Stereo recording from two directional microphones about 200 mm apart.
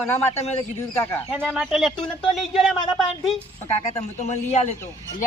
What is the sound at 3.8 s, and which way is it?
Speech, 35° left (ahead or behind).